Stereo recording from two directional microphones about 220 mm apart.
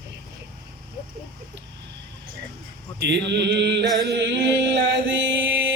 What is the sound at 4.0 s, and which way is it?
Chant, 50° right (ahead or behind).